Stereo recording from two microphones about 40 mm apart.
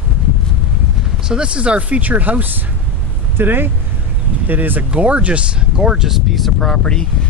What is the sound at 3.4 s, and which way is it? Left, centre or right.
Speech, right.